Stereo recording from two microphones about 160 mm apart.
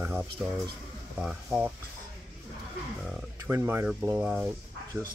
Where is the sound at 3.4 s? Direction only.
15° right (ahead or behind).